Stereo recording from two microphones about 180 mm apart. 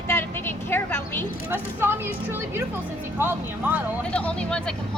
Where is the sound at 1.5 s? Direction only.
10° right (ahead or behind).